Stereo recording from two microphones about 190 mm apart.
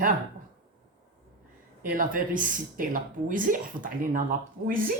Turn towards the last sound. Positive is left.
turn(degrees=-45)  # may be behind; listen again after turning